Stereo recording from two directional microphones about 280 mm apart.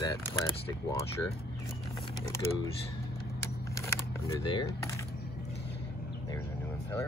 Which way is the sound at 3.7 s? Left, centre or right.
Centre.